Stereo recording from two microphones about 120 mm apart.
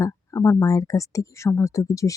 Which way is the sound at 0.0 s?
25° left (ahead or behind).